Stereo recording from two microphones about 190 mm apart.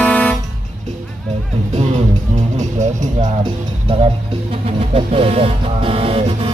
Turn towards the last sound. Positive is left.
turn(degrees=-30)  # may be behind; listen again after turning